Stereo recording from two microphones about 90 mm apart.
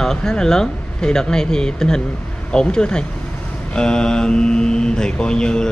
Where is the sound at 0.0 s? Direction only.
5° left (ahead or behind).